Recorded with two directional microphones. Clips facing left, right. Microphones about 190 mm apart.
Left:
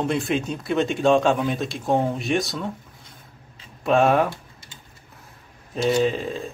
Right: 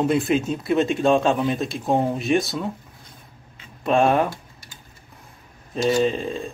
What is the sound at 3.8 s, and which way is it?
Speech, centre (ahead or behind).